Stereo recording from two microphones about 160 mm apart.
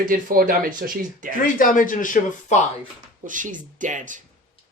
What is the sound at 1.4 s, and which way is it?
Speech, 60° left (ahead or behind).